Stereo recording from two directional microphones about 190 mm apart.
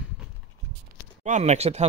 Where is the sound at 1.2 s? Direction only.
40° right (ahead or behind).